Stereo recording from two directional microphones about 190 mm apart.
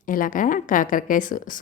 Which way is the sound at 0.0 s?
45° left (ahead or behind).